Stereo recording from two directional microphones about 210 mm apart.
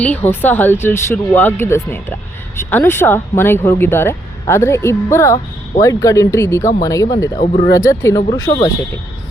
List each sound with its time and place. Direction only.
0.0 s speech: 10° left (ahead or behind)
7.3 s speech: 30° left (ahead or behind)
7.7 s speech: 15° left (ahead or behind)